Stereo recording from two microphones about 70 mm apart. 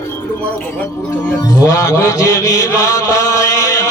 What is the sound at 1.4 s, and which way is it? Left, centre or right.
Music, left.